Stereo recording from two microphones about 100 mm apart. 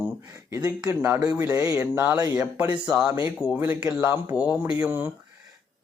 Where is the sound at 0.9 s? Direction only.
25° right (ahead or behind).